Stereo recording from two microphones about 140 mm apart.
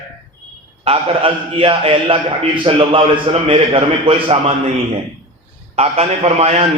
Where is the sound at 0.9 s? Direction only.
40° right (ahead or behind).